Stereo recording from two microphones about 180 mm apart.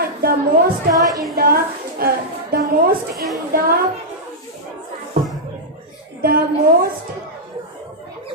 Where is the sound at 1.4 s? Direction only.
55° right (ahead or behind).